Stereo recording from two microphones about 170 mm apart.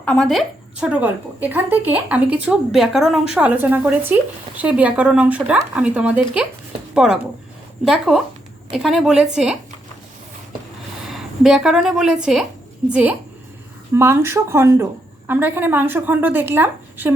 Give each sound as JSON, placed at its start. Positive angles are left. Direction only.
{"t": 0.0, "sound": "a woman's voice", "side_deg": 5}
{"t": 11.1, "sound": "a woman's voice", "side_deg": -5}